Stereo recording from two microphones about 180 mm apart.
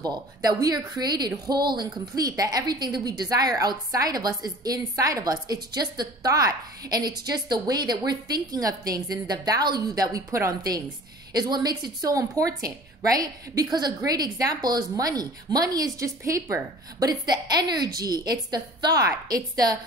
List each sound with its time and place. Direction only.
0.0 s a woman's voice: 20° right (ahead or behind)